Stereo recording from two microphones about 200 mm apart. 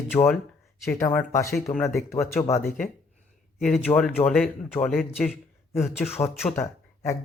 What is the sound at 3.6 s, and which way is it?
A man's voice, 5° left (ahead or behind).